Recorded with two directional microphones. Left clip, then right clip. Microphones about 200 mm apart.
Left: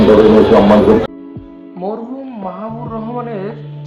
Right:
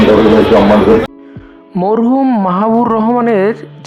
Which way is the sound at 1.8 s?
55° right (ahead or behind).